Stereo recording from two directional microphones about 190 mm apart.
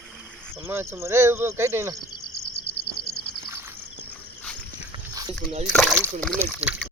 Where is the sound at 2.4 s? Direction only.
55° left (ahead or behind).